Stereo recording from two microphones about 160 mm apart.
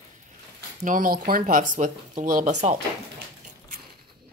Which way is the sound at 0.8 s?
60° right (ahead or behind).